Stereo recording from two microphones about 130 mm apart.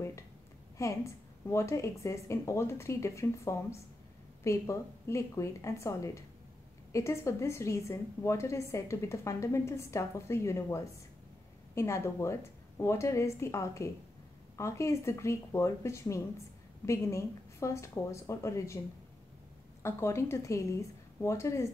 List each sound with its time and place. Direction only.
0.7 s a woman's voice: 25° left (ahead or behind)
19.8 s a woman's voice: 20° left (ahead or behind)